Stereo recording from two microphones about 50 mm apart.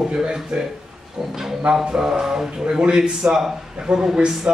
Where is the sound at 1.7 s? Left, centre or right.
Centre.